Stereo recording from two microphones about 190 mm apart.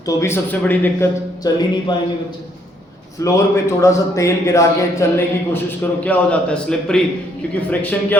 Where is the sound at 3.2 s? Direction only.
15° left (ahead or behind).